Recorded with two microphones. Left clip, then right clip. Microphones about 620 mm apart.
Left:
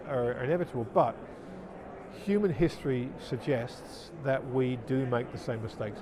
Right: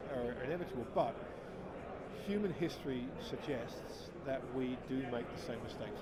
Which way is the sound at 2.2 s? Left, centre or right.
Left.